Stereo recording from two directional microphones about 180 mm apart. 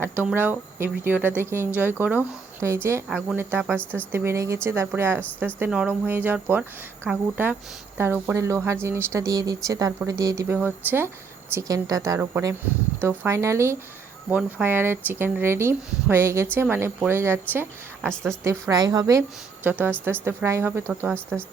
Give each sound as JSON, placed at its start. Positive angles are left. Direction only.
{"t": 0.0, "sound": "speech", "side_deg": -10}
{"t": 18.1, "sound": "a woman's voice", "side_deg": 5}
{"t": 18.4, "sound": "a woman's voice", "side_deg": -20}
{"t": 19.6, "sound": "speech", "side_deg": -10}